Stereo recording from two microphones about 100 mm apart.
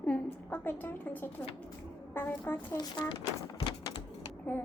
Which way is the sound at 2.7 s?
45° left (ahead or behind).